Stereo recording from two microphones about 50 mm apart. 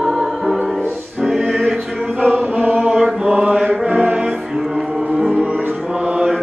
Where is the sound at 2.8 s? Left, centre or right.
Centre.